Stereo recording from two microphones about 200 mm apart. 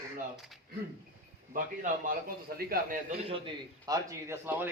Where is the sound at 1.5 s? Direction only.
40° right (ahead or behind).